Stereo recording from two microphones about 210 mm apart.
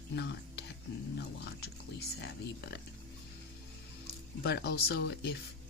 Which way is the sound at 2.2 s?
50° left (ahead or behind).